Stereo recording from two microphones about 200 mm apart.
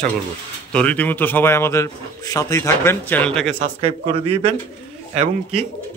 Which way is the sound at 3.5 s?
30° right (ahead or behind).